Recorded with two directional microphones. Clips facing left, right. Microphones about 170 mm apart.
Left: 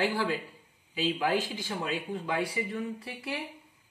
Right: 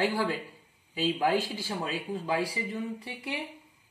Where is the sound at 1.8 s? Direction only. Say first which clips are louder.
Left 2 dB; 30° right (ahead or behind).